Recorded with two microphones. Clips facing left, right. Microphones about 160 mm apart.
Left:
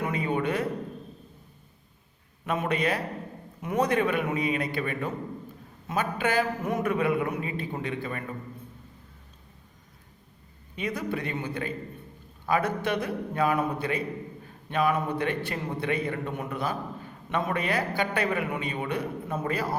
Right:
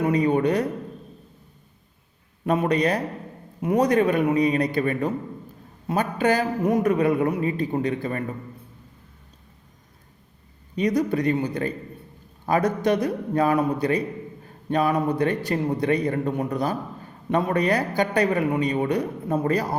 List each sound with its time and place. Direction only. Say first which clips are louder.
0.0 s a sound: right 8 dB; 40° right (ahead or behind)
2.5 s a man's voice: right 6 dB; 40° right (ahead or behind)
10.8 s a man's voice: right 9 dB; 40° right (ahead or behind)